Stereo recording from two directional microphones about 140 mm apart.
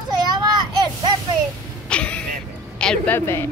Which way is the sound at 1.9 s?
10° left (ahead or behind).